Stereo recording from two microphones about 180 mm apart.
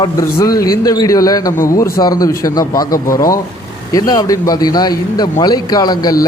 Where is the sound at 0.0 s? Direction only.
20° left (ahead or behind).